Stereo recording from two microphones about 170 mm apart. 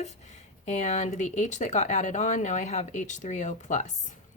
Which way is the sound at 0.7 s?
40° left (ahead or behind).